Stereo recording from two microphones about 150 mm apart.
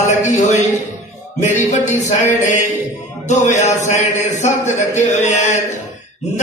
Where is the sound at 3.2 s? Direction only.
50° left (ahead or behind).